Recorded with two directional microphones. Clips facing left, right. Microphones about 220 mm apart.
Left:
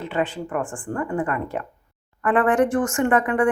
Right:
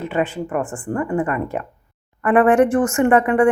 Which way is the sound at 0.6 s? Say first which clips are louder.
Right 4 dB; 20° right (ahead or behind).